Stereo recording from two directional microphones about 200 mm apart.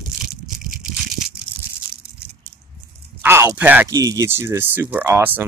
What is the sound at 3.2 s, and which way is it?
Speech, 10° right (ahead or behind).